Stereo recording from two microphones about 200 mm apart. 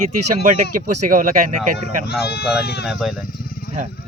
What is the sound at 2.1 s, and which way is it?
Speech, 55° left (ahead or behind).